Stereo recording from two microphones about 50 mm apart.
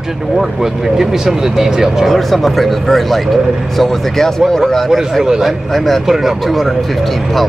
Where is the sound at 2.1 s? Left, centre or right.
Centre.